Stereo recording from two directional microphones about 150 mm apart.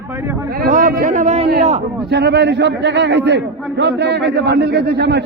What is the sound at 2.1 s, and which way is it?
Speech, 90° right.